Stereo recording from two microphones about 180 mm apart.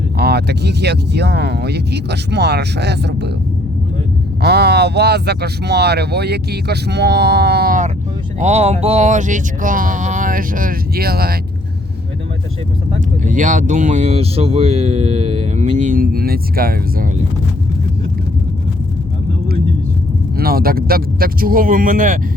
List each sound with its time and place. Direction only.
0.2 s speech: 65° right (ahead or behind)
4.4 s speech: 65° right (ahead or behind)
8.4 s speech: 40° right (ahead or behind); by 11.3 s 60° right (ahead or behind)
13.2 s speech: 45° right (ahead or behind)
20.3 s speech: 55° right (ahead or behind)